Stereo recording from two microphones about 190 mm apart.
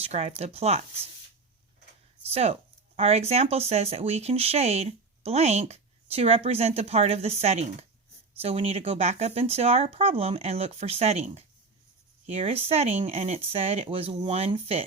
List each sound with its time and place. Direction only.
0.0 s speech: 35° right (ahead or behind)
2.3 s speech: 35° right (ahead or behind)